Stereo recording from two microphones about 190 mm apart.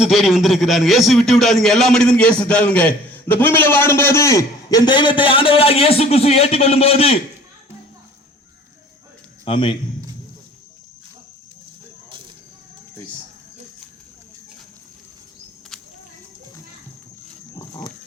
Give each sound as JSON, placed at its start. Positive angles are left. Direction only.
{"t": 0.0, "sound": "a man's voice", "side_deg": 0}
{"t": 9.4, "sound": "a man's voice", "side_deg": 25}